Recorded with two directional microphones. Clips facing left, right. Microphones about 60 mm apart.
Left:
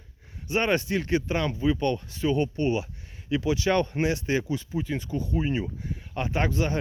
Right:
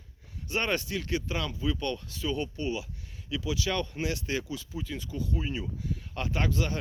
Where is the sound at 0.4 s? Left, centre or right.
Left.